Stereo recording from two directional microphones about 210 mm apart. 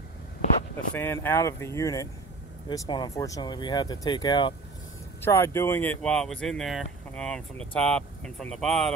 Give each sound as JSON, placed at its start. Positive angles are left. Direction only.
{"t": 0.9, "sound": "speech", "side_deg": 10}
{"t": 5.2, "sound": "speech", "side_deg": 10}